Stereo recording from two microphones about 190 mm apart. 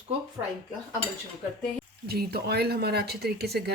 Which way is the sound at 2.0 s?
55° right (ahead or behind).